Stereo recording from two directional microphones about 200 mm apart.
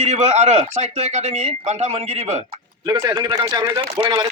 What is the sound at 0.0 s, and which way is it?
A man's voice, 35° right (ahead or behind).